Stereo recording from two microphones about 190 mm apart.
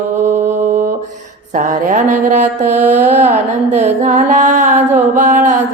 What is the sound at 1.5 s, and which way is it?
Speech, 40° right (ahead or behind).